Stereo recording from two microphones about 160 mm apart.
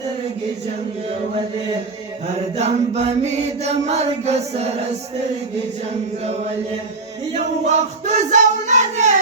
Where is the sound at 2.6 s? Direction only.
40° right (ahead or behind).